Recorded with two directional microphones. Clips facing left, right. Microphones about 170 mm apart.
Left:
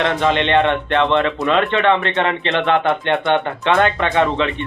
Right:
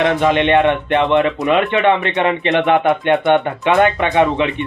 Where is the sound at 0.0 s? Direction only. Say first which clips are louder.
Right 3 dB; 15° right (ahead or behind).